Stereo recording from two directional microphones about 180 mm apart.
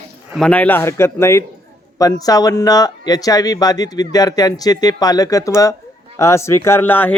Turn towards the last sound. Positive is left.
turn(degrees=10)  # may be behind; listen again after turning